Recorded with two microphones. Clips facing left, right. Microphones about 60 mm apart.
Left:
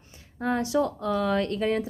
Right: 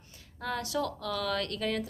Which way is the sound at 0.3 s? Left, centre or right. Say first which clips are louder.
Left 8 dB; left.